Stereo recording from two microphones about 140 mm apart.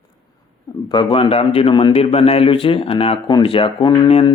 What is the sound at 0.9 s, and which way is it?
Speech, 35° left (ahead or behind).